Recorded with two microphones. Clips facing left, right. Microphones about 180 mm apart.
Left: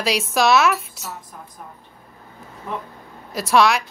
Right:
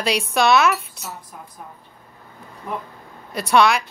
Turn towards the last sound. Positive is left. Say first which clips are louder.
# even
turn(degrees=0)  # may be behind; listen again after turning